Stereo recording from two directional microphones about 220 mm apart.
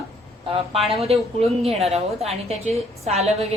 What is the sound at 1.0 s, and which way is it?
A woman's voice, 25° right (ahead or behind).